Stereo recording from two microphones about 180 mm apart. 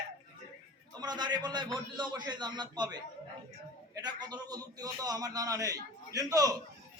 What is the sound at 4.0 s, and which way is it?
A man's voice, 20° right (ahead or behind).